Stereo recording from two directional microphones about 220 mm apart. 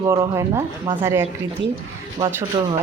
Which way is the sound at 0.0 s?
15° right (ahead or behind).